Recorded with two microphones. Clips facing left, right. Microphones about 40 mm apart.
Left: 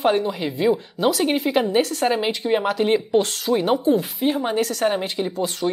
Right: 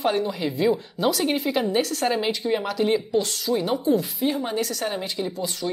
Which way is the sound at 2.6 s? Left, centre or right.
Left.